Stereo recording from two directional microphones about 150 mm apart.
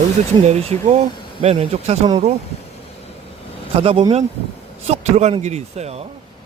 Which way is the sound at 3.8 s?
35° right (ahead or behind).